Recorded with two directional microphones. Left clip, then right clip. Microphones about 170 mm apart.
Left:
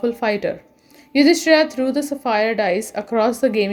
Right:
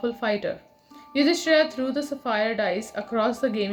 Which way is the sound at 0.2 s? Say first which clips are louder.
Left 6 dB; 35° left (ahead or behind).